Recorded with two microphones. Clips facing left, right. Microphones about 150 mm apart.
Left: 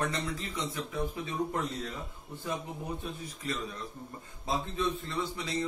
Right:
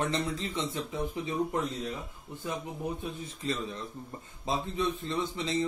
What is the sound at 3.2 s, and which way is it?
A man's voice, 25° right (ahead or behind).